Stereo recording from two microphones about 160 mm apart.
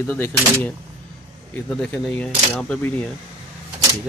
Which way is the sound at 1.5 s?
10° left (ahead or behind).